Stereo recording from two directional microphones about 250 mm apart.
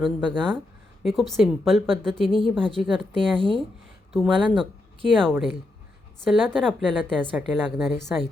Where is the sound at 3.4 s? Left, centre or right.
Right.